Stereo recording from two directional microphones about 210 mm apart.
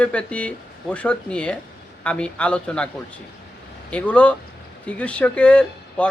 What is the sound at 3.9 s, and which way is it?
A man's voice, 5° left (ahead or behind).